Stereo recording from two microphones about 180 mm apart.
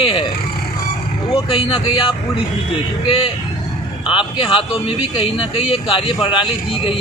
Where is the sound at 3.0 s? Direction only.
30° left (ahead or behind).